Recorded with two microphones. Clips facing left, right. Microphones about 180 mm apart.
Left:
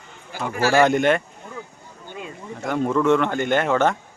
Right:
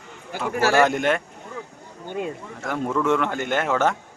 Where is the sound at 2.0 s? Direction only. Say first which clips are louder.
Right 7 dB; 50° right (ahead or behind).